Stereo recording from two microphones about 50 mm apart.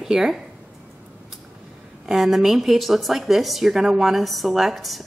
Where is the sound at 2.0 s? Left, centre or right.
Centre.